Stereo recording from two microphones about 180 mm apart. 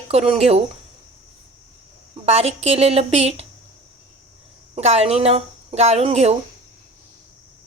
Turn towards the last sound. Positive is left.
turn(degrees=-35)  # may be behind; listen again after turning